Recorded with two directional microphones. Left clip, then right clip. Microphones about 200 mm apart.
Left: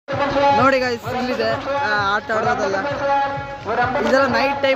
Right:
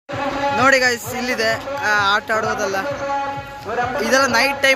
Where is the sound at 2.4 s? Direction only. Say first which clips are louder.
Left 1 dB; 45° right (ahead or behind).